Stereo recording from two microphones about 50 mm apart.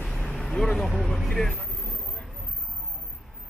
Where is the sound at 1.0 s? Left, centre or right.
Centre.